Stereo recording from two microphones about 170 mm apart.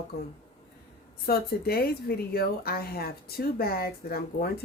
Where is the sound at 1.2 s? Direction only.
65° left (ahead or behind).